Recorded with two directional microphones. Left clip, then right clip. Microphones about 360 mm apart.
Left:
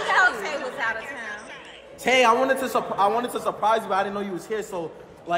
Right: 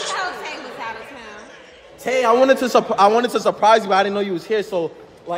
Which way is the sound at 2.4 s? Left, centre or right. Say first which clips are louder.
Right 8 dB; right.